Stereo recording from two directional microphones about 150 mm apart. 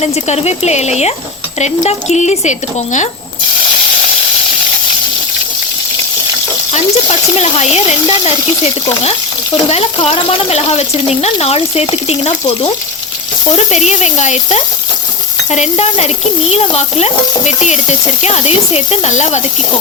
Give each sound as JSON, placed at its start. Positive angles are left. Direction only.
{"t": 0.0, "sound": "speech", "side_deg": 45}
{"t": 6.7, "sound": "speech", "side_deg": 45}